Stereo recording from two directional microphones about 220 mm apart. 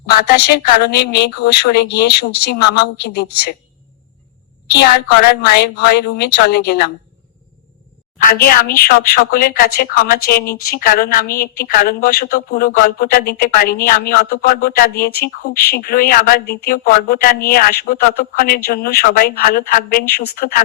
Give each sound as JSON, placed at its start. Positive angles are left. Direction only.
{"t": 0.0, "sound": "speech", "side_deg": 45}
{"t": 4.7, "sound": "speech", "side_deg": 50}
{"t": 8.2, "sound": "speech", "side_deg": 40}